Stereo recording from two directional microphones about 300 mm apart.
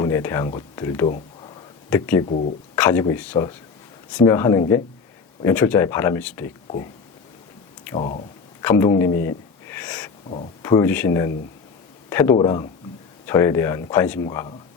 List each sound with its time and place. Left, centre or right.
0.0 s speech: centre
1.5 s a sound: centre
2.2 s speech: left
2.7 s speech: centre
7.9 s speech: left
8.6 s a sound: centre
10.2 s speech: left
10.6 s a man's voice: centre